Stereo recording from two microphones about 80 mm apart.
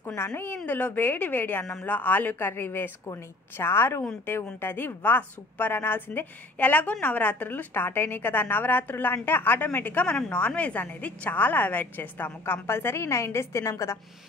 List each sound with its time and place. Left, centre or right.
0.7 s a woman's voice: left